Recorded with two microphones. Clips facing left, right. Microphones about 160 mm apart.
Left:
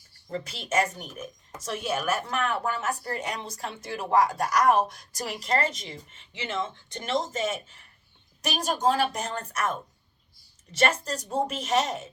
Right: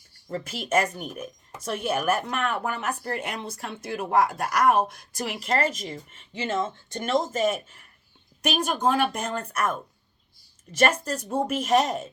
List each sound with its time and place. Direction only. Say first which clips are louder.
0.3 s speech: right 3 dB; 50° right (ahead or behind)